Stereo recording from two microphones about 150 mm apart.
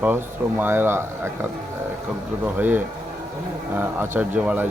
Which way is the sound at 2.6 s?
10° right (ahead or behind).